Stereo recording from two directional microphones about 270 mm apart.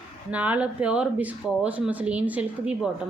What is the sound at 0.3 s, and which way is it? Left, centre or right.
Speech, centre.